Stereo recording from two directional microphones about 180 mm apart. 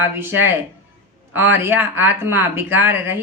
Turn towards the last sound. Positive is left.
turn(degrees=-10)  # may be behind; listen again after turning